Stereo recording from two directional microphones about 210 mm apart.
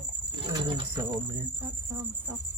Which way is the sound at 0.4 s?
20° right (ahead or behind).